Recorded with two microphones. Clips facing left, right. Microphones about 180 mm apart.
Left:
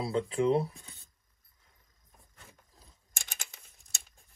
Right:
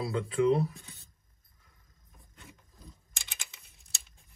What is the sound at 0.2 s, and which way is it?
Speech, 30° left (ahead or behind).